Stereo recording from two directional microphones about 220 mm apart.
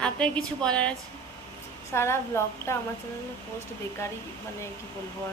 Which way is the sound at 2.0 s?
10° left (ahead or behind).